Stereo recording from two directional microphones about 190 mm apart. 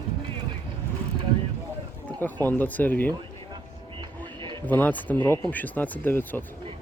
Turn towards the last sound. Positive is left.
turn(degrees=10)  # may be behind; listen again after turning